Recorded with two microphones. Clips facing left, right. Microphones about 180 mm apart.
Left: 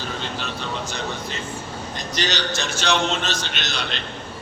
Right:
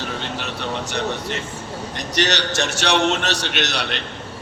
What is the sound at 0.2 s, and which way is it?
Vehicle, 65° right (ahead or behind).